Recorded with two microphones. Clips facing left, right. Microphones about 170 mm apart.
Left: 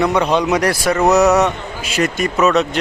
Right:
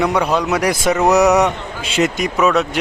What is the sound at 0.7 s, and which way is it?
A man's voice, 20° right (ahead or behind).